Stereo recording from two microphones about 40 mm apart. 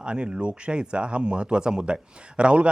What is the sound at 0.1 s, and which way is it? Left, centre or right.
Speech, right.